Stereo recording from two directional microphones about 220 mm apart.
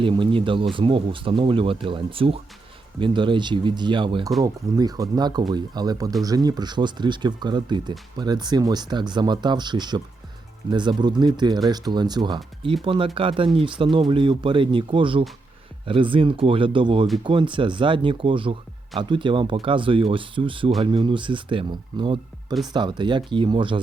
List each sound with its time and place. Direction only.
0.0 s speech: 20° right (ahead or behind)